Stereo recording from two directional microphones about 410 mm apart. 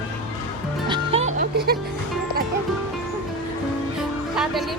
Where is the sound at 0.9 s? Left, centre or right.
Centre.